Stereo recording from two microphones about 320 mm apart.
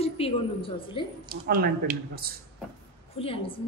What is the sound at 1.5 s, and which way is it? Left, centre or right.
Speech, right.